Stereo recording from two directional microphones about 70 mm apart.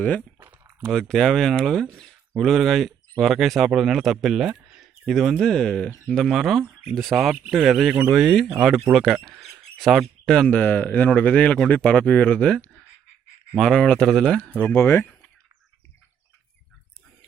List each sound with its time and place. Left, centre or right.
0.2 s a sound: right
0.8 s speech: centre
10.5 s a man's voice: left
14.8 s speech: left